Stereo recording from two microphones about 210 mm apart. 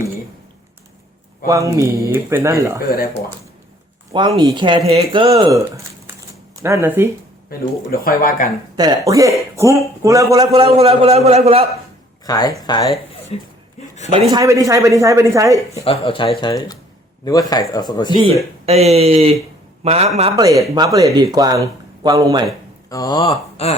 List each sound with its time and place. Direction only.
1.5 s speech: 15° right (ahead or behind)
4.1 s a man's voice: 20° right (ahead or behind)
6.8 s speech: 10° right (ahead or behind)
7.9 s speech: 45° left (ahead or behind)
8.7 s a man's voice: 20° right (ahead or behind)
12.2 s speech: 15° left (ahead or behind)
13.3 s speech: 30° left (ahead or behind)
14.1 s speech: 20° right (ahead or behind)
15.7 s speech: 30° left (ahead or behind)
18.6 s a man's voice: 30° right (ahead or behind)
20.3 s speech: 15° right (ahead or behind)
22.9 s speech: 15° left (ahead or behind)